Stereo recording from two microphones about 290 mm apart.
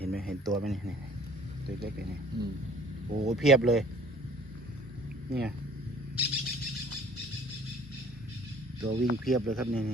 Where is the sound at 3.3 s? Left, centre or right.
Centre.